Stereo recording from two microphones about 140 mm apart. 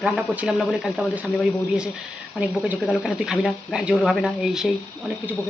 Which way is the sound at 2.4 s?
5° right (ahead or behind).